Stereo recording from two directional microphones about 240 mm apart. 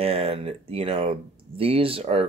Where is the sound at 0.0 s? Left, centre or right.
Right.